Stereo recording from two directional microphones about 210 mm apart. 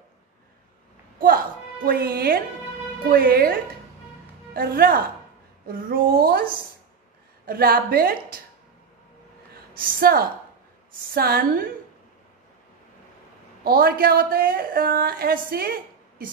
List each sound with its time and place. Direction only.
1.9 s a woman's voice: 45° right (ahead or behind)
4.6 s a woman's voice: 45° right (ahead or behind)
7.4 s a woman's voice: 45° right (ahead or behind)
9.8 s a woman's voice: 45° right (ahead or behind)
13.7 s a woman's voice: 45° right (ahead or behind)